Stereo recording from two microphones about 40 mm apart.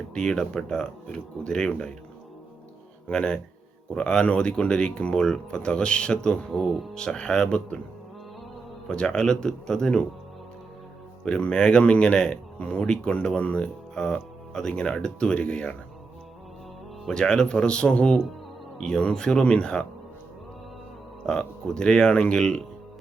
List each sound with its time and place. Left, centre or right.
0.1 s speech: centre
3.1 s speech: left
6.5 s speech: centre
6.9 s speech: left
8.9 s speech: left
11.3 s speech: left
13.9 s music: centre
14.7 s speech: left
17.1 s speech: centre
21.2 s speech: centre